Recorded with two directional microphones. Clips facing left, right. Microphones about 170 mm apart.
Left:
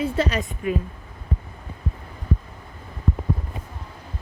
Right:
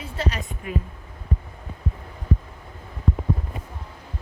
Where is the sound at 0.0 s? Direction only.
90° left.